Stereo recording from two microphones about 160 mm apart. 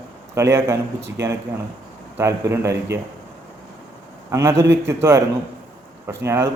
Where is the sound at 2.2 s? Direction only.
20° right (ahead or behind).